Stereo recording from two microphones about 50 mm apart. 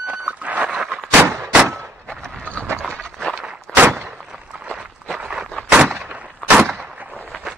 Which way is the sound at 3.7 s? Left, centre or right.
Right.